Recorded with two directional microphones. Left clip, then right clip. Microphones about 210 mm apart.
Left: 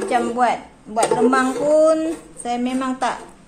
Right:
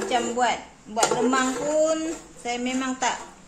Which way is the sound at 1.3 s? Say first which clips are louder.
Left 7 dB; 30° left (ahead or behind).